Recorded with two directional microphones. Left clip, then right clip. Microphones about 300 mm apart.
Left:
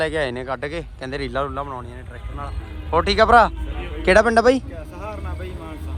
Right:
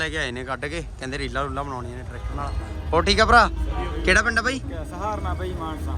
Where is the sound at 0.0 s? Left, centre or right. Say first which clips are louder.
Left 4 dB; centre.